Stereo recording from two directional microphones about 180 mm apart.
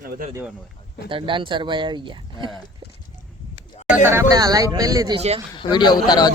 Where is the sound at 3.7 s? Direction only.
40° left (ahead or behind).